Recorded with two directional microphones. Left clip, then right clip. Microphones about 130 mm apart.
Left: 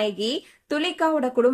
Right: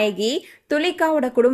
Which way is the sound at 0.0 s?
30° right (ahead or behind).